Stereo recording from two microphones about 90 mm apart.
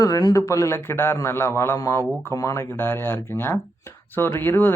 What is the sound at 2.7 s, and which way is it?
Speech, 25° left (ahead or behind).